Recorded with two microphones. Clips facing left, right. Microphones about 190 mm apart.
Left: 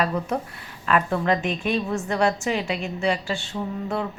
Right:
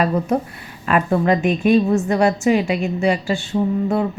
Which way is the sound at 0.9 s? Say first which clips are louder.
Right 5 dB; 10° right (ahead or behind).